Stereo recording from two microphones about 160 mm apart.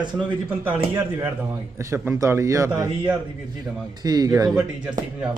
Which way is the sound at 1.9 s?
15° right (ahead or behind).